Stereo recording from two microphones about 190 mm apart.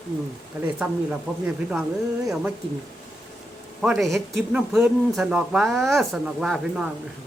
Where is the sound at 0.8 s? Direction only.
15° right (ahead or behind).